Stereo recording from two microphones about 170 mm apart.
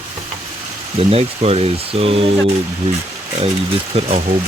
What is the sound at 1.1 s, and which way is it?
Speech, 35° right (ahead or behind).